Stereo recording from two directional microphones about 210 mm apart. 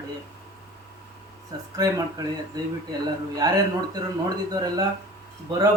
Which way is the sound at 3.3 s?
20° right (ahead or behind).